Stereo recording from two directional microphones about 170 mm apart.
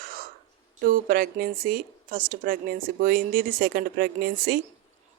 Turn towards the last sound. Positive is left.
turn(degrees=-60)  # may be behind; listen again after turning